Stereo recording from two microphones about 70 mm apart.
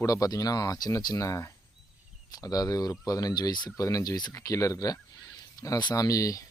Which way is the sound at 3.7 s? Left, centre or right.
Left.